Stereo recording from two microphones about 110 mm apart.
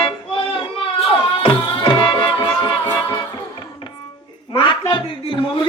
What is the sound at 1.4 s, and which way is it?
Music, 50° left (ahead or behind).